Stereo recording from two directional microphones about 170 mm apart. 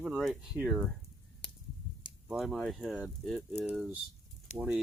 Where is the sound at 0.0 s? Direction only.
Centre (ahead or behind).